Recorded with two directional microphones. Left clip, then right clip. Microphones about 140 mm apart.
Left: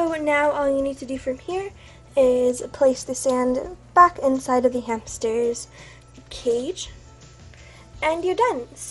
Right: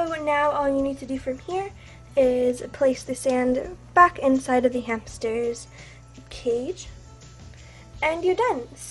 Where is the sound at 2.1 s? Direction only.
15° left (ahead or behind).